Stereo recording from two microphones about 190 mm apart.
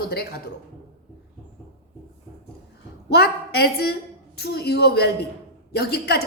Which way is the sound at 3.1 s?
55° left (ahead or behind).